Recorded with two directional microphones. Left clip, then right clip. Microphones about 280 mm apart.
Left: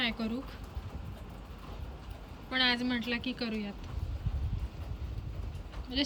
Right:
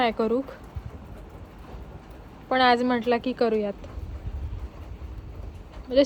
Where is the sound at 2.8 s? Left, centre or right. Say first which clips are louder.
Right 10 dB; centre.